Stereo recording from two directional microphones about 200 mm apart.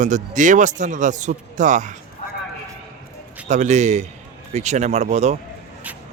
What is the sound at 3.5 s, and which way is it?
A man's voice, 35° right (ahead or behind).